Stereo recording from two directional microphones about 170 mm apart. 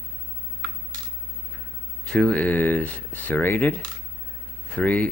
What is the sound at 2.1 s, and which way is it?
Speech, 5° left (ahead or behind).